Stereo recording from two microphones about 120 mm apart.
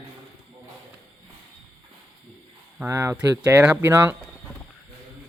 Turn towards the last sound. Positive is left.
turn(degrees=-15)  # may be behind; listen again after turning